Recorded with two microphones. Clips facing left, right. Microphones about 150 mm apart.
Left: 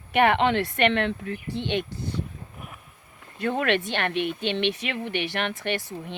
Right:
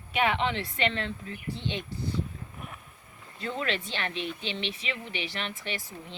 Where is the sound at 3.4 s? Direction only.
60° left (ahead or behind).